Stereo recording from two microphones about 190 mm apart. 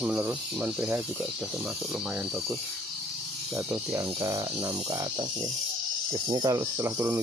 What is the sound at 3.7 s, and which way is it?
Speech, 15° right (ahead or behind).